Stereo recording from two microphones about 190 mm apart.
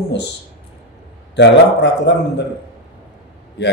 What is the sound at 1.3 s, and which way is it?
A man's voice, 65° left (ahead or behind).